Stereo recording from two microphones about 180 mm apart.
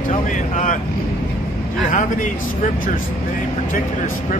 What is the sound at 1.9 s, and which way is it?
Speech, 45° left (ahead or behind).